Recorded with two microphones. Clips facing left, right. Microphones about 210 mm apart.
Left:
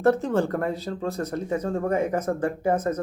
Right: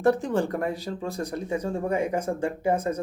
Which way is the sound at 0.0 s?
15° right (ahead or behind).